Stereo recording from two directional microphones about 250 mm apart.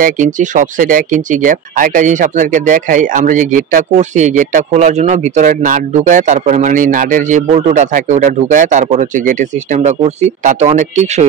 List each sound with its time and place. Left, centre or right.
0.0 s speech: right